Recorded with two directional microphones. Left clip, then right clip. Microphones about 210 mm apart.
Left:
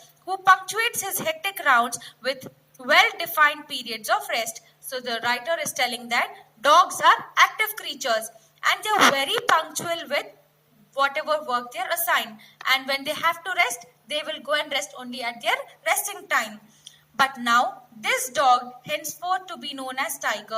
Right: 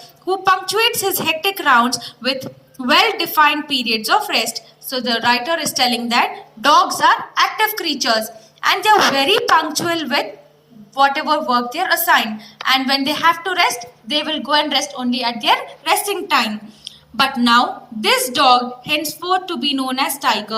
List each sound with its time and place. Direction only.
0.3 s a woman's voice: 35° left (ahead or behind)
17.2 s a woman's voice: 30° left (ahead or behind)